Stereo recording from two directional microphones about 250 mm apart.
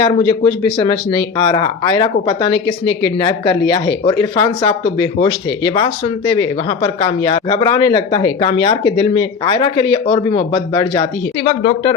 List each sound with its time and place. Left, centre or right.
0.0 s speech: centre